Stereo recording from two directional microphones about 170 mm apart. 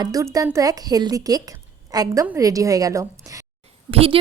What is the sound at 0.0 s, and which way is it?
A woman's voice, 20° right (ahead or behind).